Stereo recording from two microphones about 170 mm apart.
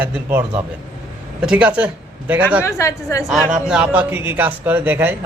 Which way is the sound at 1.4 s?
5° right (ahead or behind).